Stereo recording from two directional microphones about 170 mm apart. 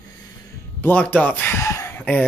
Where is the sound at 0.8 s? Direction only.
10° left (ahead or behind).